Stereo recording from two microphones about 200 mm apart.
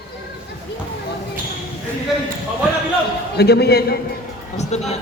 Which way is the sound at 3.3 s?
55° left (ahead or behind).